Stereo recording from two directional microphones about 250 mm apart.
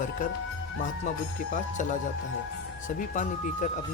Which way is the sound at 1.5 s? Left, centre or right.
Left.